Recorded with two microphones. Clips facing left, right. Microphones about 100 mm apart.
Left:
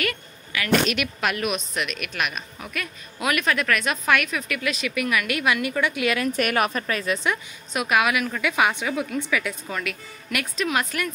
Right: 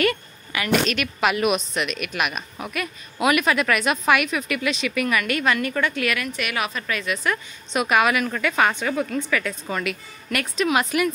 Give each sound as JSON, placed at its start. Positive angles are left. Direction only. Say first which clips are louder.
{"t": 0.0, "sound": "a woman's voice", "louder": "right 6 dB", "side_deg": -25}
{"t": 0.8, "sound": "a woman's voice", "louder": "even", "side_deg": 10}
{"t": 1.2, "sound": "a woman's voice", "louder": "right 7 dB", "side_deg": -5}
{"t": 6.0, "sound": "a woman's voice", "louder": "left 2 dB", "side_deg": 30}
{"t": 6.3, "sound": "a woman's voice", "louder": "left 4 dB", "side_deg": 45}
{"t": 7.7, "sound": "a woman's voice", "louder": "right 2 dB", "side_deg": 0}
{"t": 9.7, "sound": "a woman's voice", "louder": "right 3 dB", "side_deg": 0}